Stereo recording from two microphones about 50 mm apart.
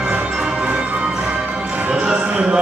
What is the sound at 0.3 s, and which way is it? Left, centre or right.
Music, centre.